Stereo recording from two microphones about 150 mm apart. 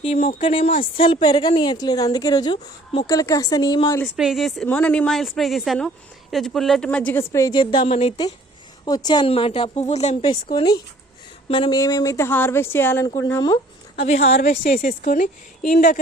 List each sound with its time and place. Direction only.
0.4 s a woman's voice: 35° left (ahead or behind)
4.0 s a woman's voice: centre (ahead or behind); by 7.5 s 20° left (ahead or behind)
7.5 s a woman's voice: 30° left (ahead or behind)
7.9 s a woman's voice: 45° left (ahead or behind)
8.8 s a woman's voice: 25° left (ahead or behind); by 10.2 s 45° left (ahead or behind)
10.2 s a woman's voice: 30° left (ahead or behind)
11.8 s speech: 20° left (ahead or behind)
14.0 s a woman's voice: 45° left (ahead or behind)
14.4 s a woman's voice: 70° left (ahead or behind)